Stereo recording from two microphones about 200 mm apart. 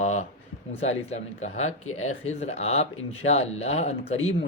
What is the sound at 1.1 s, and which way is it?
Speech, 35° left (ahead or behind).